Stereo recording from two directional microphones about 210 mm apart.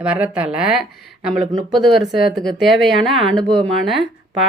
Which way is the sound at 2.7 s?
Centre (ahead or behind).